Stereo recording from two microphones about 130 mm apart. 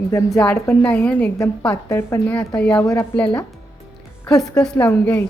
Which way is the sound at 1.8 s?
20° left (ahead or behind).